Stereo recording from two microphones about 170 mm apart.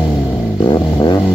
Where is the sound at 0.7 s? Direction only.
25° left (ahead or behind).